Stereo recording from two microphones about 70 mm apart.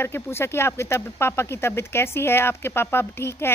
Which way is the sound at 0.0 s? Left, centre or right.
Left.